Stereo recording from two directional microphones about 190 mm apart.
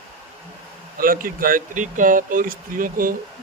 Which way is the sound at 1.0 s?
50° right (ahead or behind).